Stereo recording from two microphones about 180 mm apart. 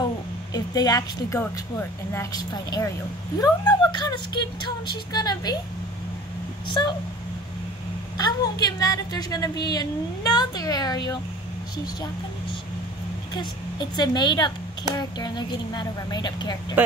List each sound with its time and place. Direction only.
0.0 s a woman's voice: 20° left (ahead or behind)
8.2 s speech: 20° left (ahead or behind)
13.3 s speech: 25° left (ahead or behind)
16.8 s speech: 10° right (ahead or behind)